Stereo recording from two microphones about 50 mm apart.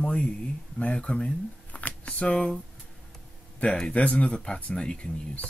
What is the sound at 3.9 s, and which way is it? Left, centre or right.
Speech, left.